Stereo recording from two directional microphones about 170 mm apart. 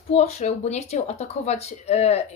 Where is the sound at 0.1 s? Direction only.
40° left (ahead or behind).